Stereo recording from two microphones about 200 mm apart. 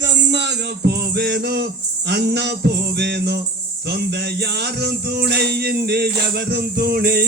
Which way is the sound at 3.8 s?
55° right (ahead or behind).